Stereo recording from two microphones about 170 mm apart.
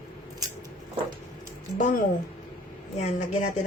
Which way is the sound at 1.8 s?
50° left (ahead or behind).